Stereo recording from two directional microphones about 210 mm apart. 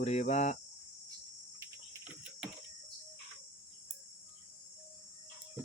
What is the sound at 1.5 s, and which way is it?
Cricket, 15° right (ahead or behind).